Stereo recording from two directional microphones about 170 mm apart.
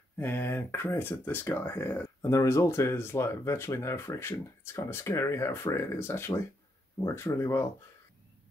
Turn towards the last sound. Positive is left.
turn(degrees=15)  # may be behind; listen again after turning